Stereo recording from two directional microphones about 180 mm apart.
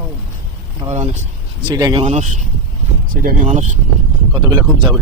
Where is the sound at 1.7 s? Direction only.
20° right (ahead or behind).